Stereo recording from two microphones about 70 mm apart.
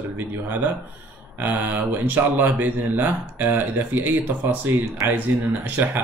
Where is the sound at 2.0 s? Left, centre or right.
Right.